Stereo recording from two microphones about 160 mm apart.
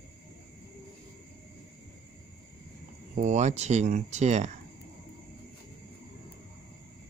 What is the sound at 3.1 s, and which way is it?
Speech, 50° right (ahead or behind).